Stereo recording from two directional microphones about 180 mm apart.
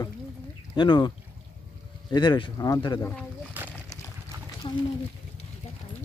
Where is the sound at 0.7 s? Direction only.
25° left (ahead or behind).